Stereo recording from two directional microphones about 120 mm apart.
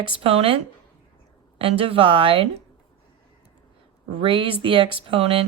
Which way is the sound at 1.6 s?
50° right (ahead or behind).